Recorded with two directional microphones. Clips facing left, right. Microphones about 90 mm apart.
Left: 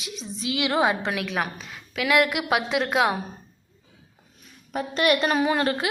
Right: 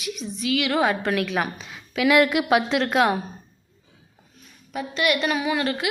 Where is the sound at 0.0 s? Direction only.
30° left (ahead or behind).